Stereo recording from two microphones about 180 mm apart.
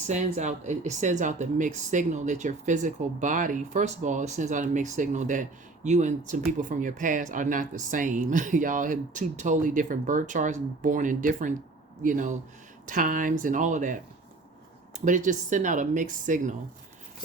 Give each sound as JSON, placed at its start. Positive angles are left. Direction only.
{"t": 0.1, "sound": "speech", "side_deg": -40}